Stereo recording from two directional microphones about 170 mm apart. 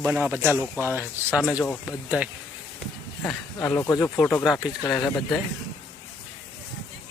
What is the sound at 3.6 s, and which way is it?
Speech, 15° left (ahead or behind).